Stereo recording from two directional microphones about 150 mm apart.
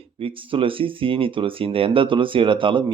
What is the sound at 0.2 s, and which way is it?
Speech, 35° right (ahead or behind).